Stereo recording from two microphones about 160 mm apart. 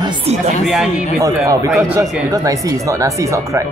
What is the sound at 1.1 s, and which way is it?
Speech, 20° right (ahead or behind).